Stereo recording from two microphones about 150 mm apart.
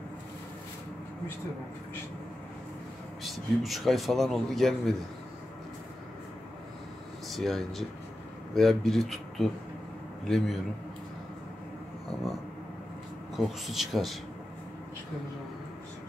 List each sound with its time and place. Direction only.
3.3 s a man's voice: centre (ahead or behind)
7.2 s a man's voice: centre (ahead or behind)
13.4 s a man's voice: centre (ahead or behind)